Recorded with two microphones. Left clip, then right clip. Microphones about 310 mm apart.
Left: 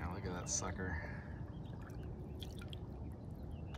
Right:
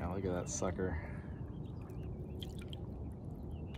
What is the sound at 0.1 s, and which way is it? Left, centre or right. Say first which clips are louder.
Speech: right 4 dB; centre.